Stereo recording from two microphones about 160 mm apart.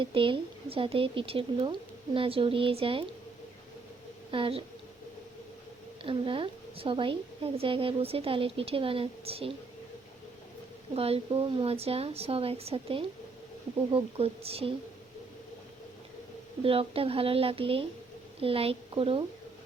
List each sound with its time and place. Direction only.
0.0 s a woman's voice: 35° right (ahead or behind)
4.3 s a woman's voice: 35° right (ahead or behind)
6.0 s a woman's voice: 35° right (ahead or behind)
10.9 s a woman's voice: 40° right (ahead or behind)
16.6 s a woman's voice: 35° right (ahead or behind)